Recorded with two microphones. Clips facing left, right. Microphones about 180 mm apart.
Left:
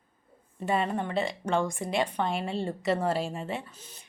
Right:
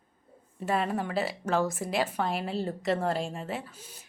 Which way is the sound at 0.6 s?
Centre (ahead or behind).